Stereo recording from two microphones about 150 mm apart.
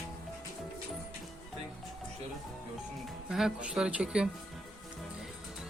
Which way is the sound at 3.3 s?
5° right (ahead or behind).